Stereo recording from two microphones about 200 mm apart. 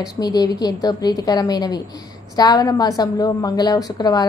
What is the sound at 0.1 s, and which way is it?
Speech, 20° left (ahead or behind).